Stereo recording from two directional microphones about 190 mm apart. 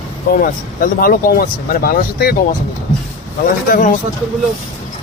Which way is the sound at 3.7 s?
45° left (ahead or behind).